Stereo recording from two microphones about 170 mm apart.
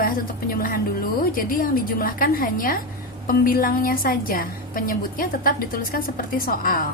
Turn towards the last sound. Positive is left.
turn(degrees=55)  # may be behind; listen again after turning